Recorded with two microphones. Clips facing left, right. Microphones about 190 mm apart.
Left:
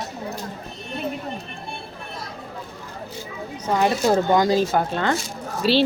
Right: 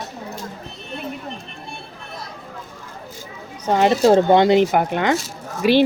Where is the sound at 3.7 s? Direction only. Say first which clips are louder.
Right 5 dB; 25° right (ahead or behind).